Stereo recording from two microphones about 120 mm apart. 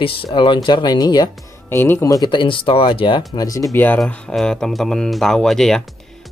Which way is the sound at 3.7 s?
15° left (ahead or behind).